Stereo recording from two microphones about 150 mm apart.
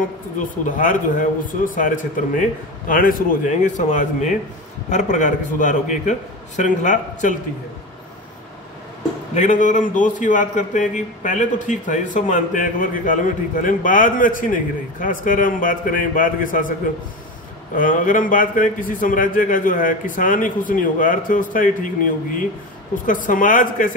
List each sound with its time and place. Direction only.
0.4 s a man's voice: 60° left (ahead or behind)
9.3 s a man's voice: 55° left (ahead or behind)
17.7 s a man's voice: 60° left (ahead or behind)